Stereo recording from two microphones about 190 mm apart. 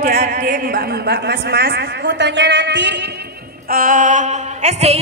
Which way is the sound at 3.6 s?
45° right (ahead or behind).